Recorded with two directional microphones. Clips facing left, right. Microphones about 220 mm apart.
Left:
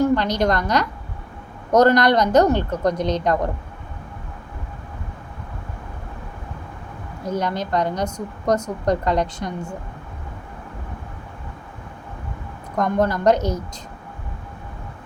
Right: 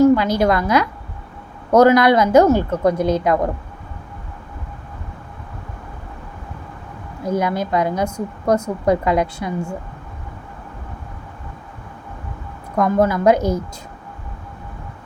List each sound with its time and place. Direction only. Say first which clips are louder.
0.2 s a woman's voice: right 3 dB; 5° right (ahead or behind)
7.3 s a woman's voice: right 4 dB; 10° right (ahead or behind)
12.7 s a woman's voice: right 4 dB; 5° right (ahead or behind)